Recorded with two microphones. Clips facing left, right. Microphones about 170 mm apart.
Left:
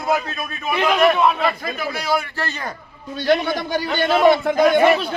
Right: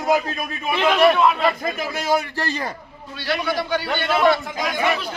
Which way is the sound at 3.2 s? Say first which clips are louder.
Left 5 dB; 50° left (ahead or behind).